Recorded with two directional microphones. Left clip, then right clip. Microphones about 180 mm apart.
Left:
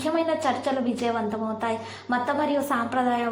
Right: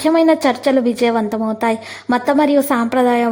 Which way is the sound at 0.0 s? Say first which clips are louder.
Right 11 dB; 45° right (ahead or behind).